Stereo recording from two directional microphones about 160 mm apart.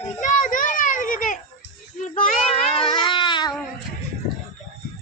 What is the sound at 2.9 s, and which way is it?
Baby cry, 30° left (ahead or behind).